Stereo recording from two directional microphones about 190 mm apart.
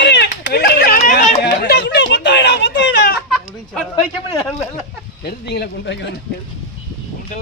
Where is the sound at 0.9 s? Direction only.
45° left (ahead or behind).